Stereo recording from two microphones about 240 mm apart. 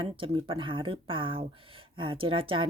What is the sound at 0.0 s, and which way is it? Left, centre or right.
A woman's voice, right.